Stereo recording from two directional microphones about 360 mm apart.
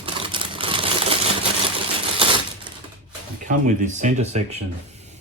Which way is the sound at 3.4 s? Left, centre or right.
Centre.